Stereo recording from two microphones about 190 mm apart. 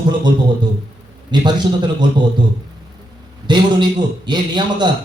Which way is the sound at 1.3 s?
25° right (ahead or behind).